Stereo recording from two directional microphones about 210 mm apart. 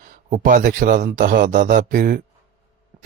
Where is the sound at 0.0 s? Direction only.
40° right (ahead or behind).